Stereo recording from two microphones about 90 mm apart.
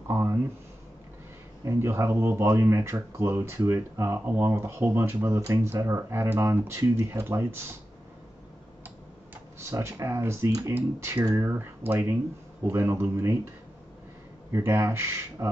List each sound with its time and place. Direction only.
0.1 s a sound: 25° right (ahead or behind)
1.6 s speech: 30° right (ahead or behind)
9.6 s speech: 30° right (ahead or behind)
10.7 s speech: 25° right (ahead or behind)
14.5 s speech: 30° right (ahead or behind)